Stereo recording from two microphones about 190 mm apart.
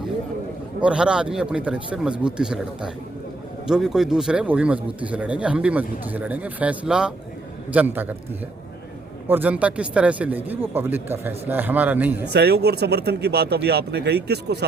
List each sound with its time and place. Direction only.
0.8 s a man's voice: 5° right (ahead or behind)
9.2 s speech: 10° right (ahead or behind)
12.2 s speech: 60° right (ahead or behind)